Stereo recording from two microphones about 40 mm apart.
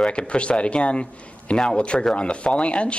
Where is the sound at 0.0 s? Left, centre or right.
Left.